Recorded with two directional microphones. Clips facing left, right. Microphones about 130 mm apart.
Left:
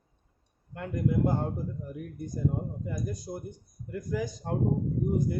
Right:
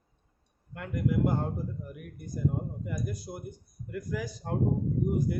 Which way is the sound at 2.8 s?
30° left (ahead or behind).